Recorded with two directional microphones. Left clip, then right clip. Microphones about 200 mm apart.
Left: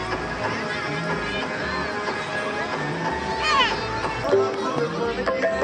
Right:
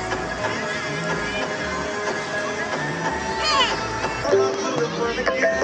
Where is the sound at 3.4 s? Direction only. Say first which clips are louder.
Even; 5° right (ahead or behind).